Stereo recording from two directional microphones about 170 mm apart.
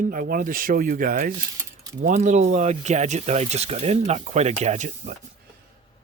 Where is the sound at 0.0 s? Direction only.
55° right (ahead or behind).